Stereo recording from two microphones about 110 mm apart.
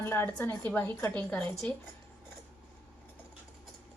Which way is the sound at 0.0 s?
20° left (ahead or behind).